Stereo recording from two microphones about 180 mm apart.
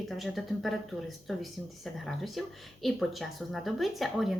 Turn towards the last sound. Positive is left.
turn(degrees=0)  # may be behind; listen again after turning